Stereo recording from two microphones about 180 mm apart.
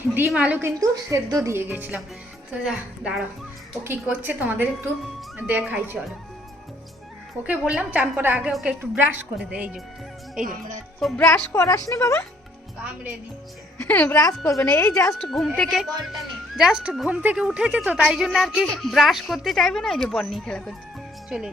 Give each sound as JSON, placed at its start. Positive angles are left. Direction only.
{"t": 0.1, "sound": "a woman's voice", "side_deg": -10}
{"t": 0.8, "sound": "a woman's voice", "side_deg": -20}
{"t": 7.4, "sound": "a woman's voice", "side_deg": -5}
{"t": 11.0, "sound": "speech", "side_deg": 5}
{"t": 13.8, "sound": "speech", "side_deg": 10}
{"t": 15.1, "sound": "a woman's voice", "side_deg": 0}